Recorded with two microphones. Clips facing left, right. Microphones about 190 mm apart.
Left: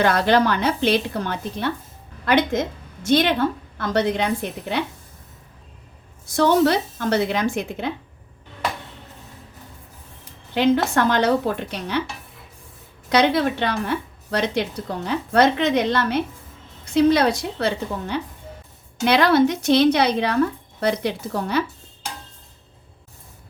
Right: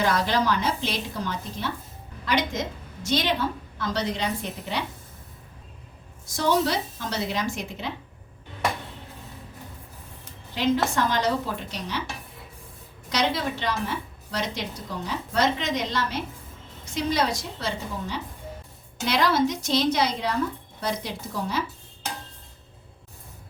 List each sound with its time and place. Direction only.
0.0 s a woman's voice: 60° left (ahead or behind)
6.3 s a woman's voice: 60° left (ahead or behind)
10.5 s a woman's voice: 60° left (ahead or behind)
13.1 s a woman's voice: 60° left (ahead or behind)